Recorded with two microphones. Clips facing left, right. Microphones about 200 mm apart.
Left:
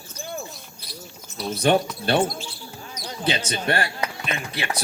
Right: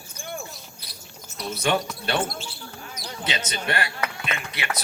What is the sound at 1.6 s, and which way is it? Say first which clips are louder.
Speech: left 5 dB; 35° left (ahead or behind).